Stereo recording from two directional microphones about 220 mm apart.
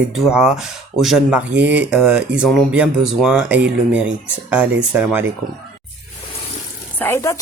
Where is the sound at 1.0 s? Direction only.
5° right (ahead or behind).